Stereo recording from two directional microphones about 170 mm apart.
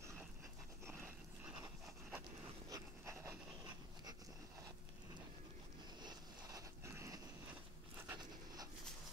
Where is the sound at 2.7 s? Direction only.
20° right (ahead or behind).